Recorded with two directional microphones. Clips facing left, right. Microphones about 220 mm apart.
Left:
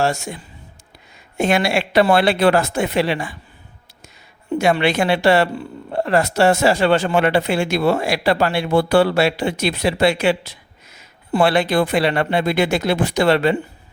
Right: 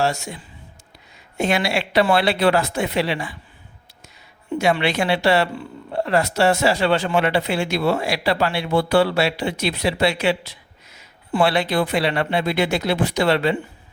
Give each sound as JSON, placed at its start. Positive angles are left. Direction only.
{"t": 0.0, "sound": "speech", "side_deg": 50}
{"t": 1.4, "sound": "speech", "side_deg": 50}
{"t": 4.5, "sound": "speech", "side_deg": 50}